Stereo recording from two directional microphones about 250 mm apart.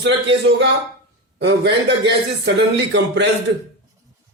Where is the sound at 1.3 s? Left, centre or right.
Right.